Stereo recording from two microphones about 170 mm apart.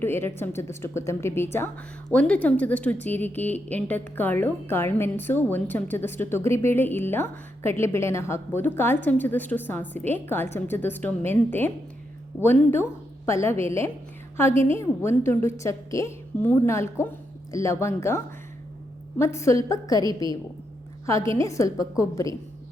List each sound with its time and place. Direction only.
0.0 s speech: 15° left (ahead or behind)
19.2 s a woman's voice: 15° left (ahead or behind)
21.1 s a woman's voice: 15° left (ahead or behind)